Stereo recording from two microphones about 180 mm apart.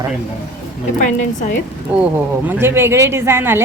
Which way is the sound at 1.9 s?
5° right (ahead or behind).